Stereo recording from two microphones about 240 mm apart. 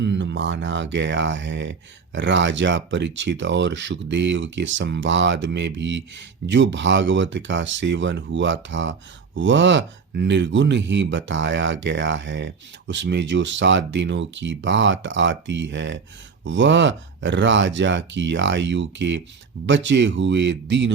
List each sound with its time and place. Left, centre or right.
0.0 s speech: right